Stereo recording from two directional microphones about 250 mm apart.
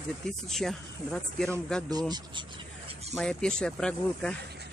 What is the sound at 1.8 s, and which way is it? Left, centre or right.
Speech, centre.